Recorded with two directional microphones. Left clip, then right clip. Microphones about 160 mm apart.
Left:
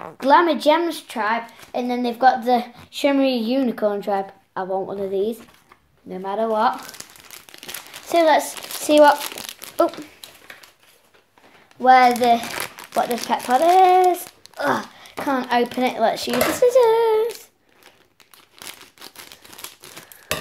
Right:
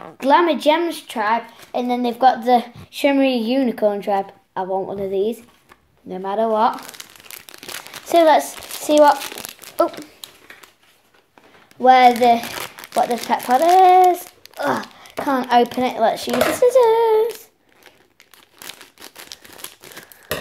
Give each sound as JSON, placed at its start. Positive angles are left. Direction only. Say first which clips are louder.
{"t": 0.0, "sound": "a woman's voice", "louder": "even", "side_deg": -5}
{"t": 6.0, "sound": "speech", "louder": "right 3 dB", "side_deg": -20}
{"t": 8.1, "sound": "speech", "louder": "right 3 dB", "side_deg": -15}
{"t": 8.4, "sound": "speech", "louder": "right 2 dB", "side_deg": 0}
{"t": 10.2, "sound": "a sound", "louder": "right 3 dB", "side_deg": -15}
{"t": 11.8, "sound": "a child's voice", "louder": "right 2 dB", "side_deg": -15}
{"t": 19.6, "sound": "crumpling", "louder": "right 1 dB", "side_deg": 0}